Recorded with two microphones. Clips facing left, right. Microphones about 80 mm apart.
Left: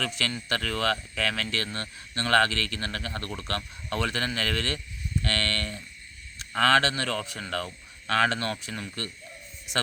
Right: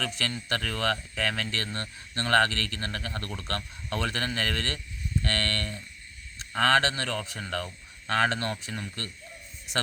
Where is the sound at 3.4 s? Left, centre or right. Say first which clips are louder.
Left 1 dB; left.